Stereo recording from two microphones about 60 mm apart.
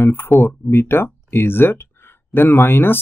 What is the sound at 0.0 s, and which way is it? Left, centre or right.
Speech, left.